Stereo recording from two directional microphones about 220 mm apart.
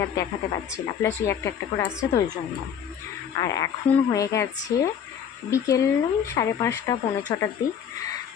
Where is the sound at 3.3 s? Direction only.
15° left (ahead or behind).